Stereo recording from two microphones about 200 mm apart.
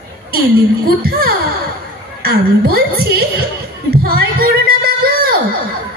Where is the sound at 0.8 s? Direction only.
50° right (ahead or behind).